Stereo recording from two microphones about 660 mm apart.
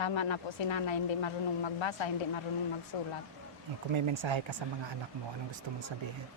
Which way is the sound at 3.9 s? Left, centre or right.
Right.